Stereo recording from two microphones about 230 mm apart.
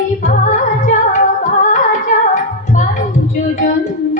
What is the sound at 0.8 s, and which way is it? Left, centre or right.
Music, left.